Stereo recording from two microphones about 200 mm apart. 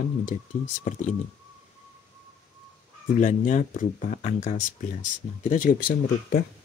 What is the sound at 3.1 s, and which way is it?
Speech, 40° left (ahead or behind).